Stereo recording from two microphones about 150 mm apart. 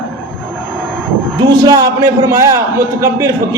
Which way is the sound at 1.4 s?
25° right (ahead or behind).